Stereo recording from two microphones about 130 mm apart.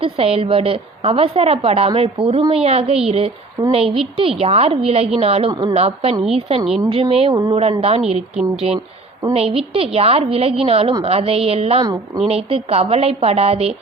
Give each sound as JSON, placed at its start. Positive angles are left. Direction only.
{"t": 0.0, "sound": "a woman's voice", "side_deg": -50}
{"t": 5.5, "sound": "speech", "side_deg": -35}
{"t": 5.7, "sound": "a woman's voice", "side_deg": -50}
{"t": 11.8, "sound": "speech", "side_deg": -30}
{"t": 12.3, "sound": "a woman's voice", "side_deg": -50}